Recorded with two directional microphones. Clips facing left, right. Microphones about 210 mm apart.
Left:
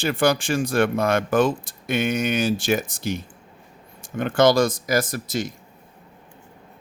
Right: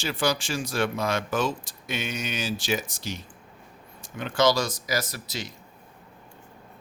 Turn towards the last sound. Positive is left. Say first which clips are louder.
# left 8 dB
turn(degrees=50)  # may be behind; listen again after turning